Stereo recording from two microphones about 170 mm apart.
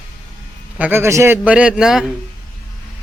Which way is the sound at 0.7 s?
10° right (ahead or behind).